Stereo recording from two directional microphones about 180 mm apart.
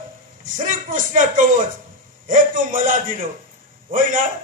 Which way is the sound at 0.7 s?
45° right (ahead or behind).